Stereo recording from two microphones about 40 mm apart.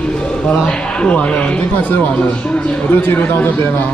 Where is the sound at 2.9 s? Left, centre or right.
Left.